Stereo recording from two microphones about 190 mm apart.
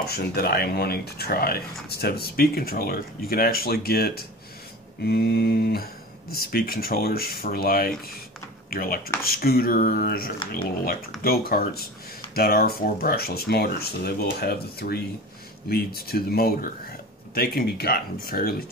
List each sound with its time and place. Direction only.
0.0 s speech: 55° left (ahead or behind)